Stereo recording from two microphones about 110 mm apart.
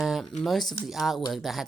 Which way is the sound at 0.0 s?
Centre (ahead or behind).